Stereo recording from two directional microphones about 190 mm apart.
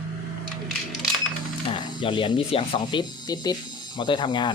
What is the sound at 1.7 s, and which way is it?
Speech, 25° left (ahead or behind).